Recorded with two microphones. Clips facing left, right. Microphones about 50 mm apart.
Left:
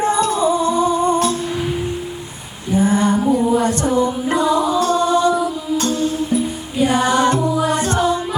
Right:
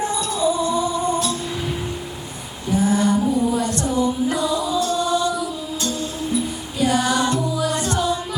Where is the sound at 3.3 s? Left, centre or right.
Left.